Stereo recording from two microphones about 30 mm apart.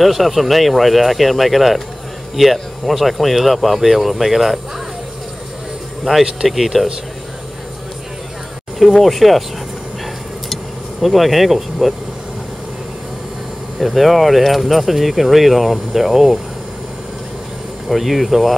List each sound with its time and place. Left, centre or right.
0.0 s speech: centre
6.1 s insect: right
6.4 s speech: centre
9.0 s speech: centre
10.5 s vehicle: centre
13.7 s speech: centre
17.8 s speech: centre